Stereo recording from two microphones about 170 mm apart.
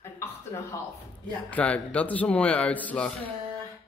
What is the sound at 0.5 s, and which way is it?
Speech, 20° left (ahead or behind).